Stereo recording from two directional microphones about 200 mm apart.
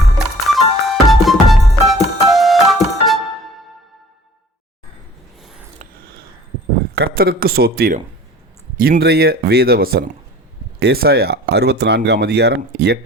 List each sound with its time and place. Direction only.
0.4 s music: centre (ahead or behind)
5.8 s a sound: 50° right (ahead or behind)
6.9 s speech: 50° right (ahead or behind)